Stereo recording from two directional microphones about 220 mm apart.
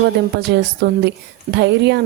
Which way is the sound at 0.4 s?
50° right (ahead or behind).